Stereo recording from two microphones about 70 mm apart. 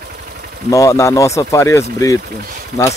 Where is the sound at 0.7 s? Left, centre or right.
Left.